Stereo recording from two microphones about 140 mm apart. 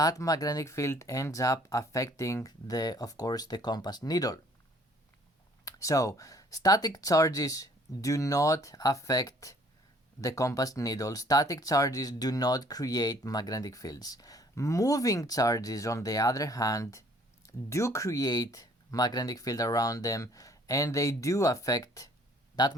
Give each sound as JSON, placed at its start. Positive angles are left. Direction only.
{"t": 0.0, "sound": "speech", "side_deg": 25}
{"t": 5.6, "sound": "speech", "side_deg": 25}